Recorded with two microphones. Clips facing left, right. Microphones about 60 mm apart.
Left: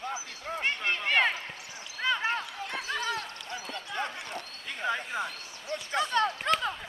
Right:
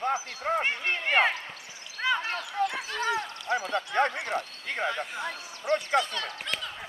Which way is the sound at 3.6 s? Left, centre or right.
Right.